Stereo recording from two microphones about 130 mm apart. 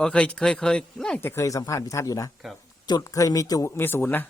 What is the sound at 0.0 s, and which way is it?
Speech, 10° left (ahead or behind).